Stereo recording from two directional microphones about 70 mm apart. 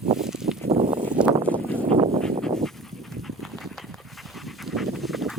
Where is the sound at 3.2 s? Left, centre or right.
Centre.